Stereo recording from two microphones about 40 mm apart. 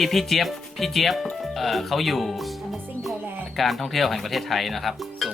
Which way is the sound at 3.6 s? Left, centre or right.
Centre.